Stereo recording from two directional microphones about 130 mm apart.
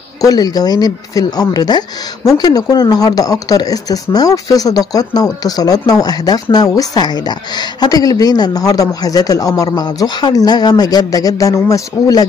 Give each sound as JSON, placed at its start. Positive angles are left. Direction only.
{"t": 0.2, "sound": "speech", "side_deg": 30}